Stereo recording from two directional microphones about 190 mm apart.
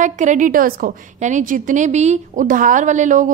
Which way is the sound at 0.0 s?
40° right (ahead or behind).